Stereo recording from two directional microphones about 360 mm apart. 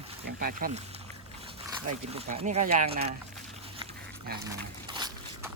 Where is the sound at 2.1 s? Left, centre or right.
Centre.